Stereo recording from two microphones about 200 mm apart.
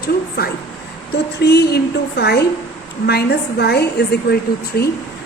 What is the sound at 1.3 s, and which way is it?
A woman's voice, 55° left (ahead or behind).